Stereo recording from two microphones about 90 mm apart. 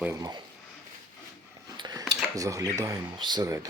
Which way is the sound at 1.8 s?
50° right (ahead or behind).